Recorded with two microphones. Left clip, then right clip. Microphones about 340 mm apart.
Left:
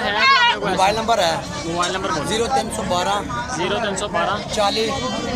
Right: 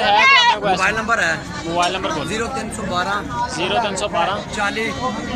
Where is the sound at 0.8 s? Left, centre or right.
Centre.